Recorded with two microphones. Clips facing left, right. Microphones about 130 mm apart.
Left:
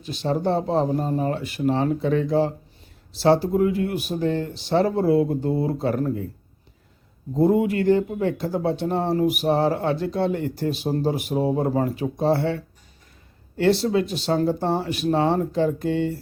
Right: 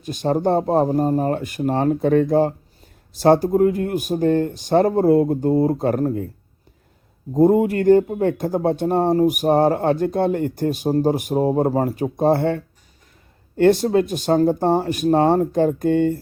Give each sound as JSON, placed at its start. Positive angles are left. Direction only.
{"t": 0.0, "sound": "speech", "side_deg": -50}
{"t": 7.3, "sound": "speech", "side_deg": -45}